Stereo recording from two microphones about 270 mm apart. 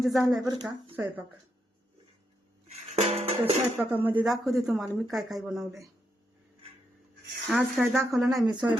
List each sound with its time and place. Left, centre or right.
0.0 s speech: centre
0.4 s speech: centre
2.9 s music: right
3.8 s speech: centre
7.4 s speech: centre
8.4 s speech: centre